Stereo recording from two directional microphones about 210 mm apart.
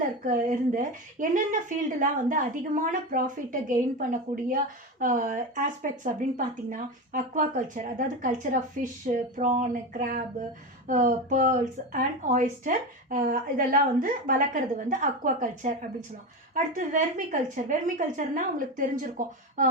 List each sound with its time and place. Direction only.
0.3 s speech: 35° right (ahead or behind)
16.7 s speech: 40° right (ahead or behind)